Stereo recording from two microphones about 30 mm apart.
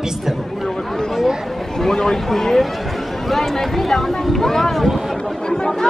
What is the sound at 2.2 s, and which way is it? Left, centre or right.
Speech, centre.